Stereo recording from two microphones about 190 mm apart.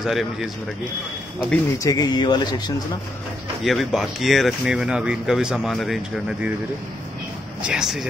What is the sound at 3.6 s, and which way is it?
Speech, centre (ahead or behind).